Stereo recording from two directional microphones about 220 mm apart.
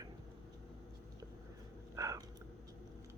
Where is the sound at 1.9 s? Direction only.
15° right (ahead or behind).